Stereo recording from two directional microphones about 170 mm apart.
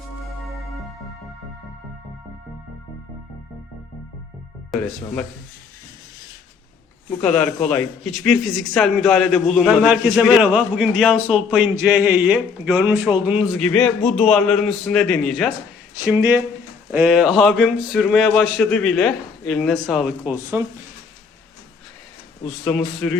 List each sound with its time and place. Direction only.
0.4 s music: centre (ahead or behind)
4.7 s a man's voice: centre (ahead or behind)
7.2 s a man's voice: 5° left (ahead or behind)
13.5 s a man's voice: 5° left (ahead or behind)
16.1 s a man's voice: 15° right (ahead or behind)
20.3 s speech: 15° right (ahead or behind)
22.6 s a man's voice: 5° left (ahead or behind)